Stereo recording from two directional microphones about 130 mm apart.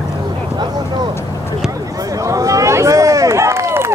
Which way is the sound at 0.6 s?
35° right (ahead or behind).